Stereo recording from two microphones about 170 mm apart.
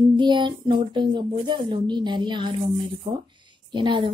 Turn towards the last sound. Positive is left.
turn(degrees=-30)  # may be behind; listen again after turning